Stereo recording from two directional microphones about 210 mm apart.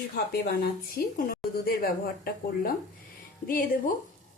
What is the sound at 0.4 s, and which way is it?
Speech, 45° left (ahead or behind).